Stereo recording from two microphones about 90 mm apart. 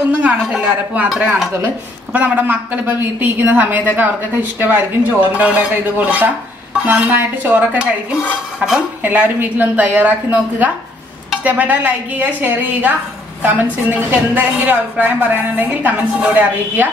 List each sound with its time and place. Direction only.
0.2 s speech: 15° right (ahead or behind)
2.1 s a woman's voice: 20° right (ahead or behind)
8.5 s speech: 5° right (ahead or behind)
9.0 s a woman's voice: 20° right (ahead or behind)